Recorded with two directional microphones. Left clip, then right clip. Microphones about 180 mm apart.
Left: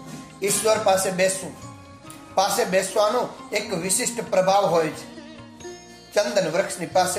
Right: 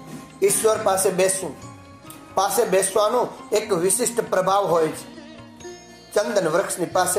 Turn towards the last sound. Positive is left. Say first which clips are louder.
# even
turn(degrees=-20)  # may be behind; listen again after turning